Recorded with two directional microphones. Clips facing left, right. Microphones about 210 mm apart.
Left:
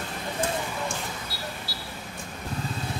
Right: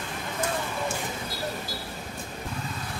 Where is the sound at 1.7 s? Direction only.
50° right (ahead or behind).